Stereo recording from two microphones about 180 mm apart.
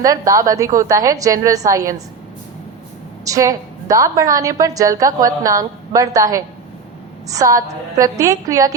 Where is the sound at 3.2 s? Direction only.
20° right (ahead or behind).